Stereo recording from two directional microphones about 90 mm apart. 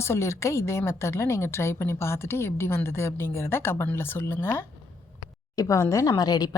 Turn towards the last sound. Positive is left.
turn(degrees=45)  # may be behind; listen again after turning